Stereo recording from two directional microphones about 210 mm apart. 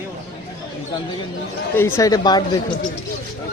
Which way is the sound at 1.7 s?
15° left (ahead or behind).